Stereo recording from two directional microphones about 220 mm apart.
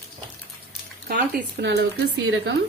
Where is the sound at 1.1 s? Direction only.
45° right (ahead or behind).